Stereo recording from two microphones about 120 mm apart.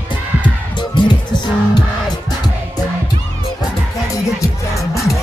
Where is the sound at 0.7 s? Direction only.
40° left (ahead or behind).